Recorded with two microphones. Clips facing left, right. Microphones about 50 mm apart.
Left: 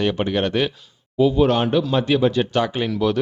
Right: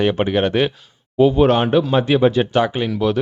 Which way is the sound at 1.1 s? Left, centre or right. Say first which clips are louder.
Right 3 dB; right.